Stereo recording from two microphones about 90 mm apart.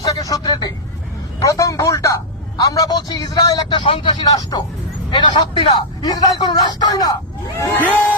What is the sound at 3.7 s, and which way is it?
Speech, 75° left (ahead or behind).